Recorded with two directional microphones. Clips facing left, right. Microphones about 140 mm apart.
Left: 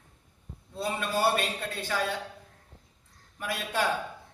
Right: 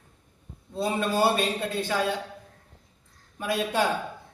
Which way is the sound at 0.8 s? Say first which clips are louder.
Right 5 dB; 25° right (ahead or behind).